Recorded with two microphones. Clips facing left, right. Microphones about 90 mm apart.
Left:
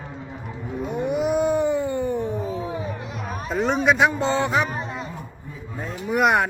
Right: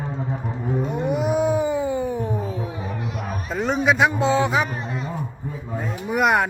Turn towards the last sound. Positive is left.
turn(degrees=0)  # may be behind; listen again after turning